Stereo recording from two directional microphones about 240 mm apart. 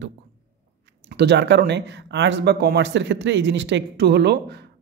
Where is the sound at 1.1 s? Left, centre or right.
Right.